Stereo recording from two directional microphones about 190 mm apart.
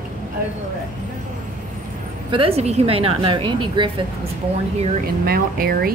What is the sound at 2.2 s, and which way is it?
A woman's voice, 30° right (ahead or behind).